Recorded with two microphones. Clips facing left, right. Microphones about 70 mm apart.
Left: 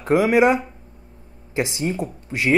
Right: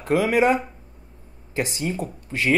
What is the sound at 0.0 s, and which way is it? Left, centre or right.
Speech, left.